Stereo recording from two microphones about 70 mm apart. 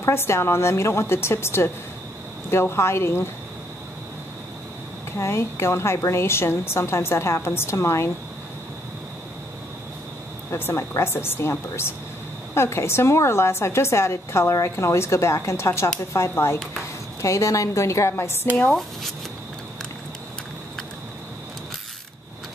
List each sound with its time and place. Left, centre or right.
0.0 s a woman's voice: left
5.1 s a woman's voice: left
10.5 s a woman's voice: left
12.5 s a woman's voice: left